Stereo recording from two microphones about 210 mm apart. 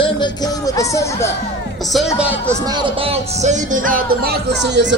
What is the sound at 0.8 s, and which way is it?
Speech, 15° left (ahead or behind).